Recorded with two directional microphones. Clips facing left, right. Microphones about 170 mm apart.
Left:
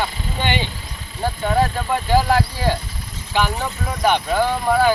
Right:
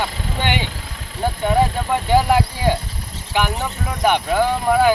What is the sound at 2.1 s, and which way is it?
Speech, 15° right (ahead or behind).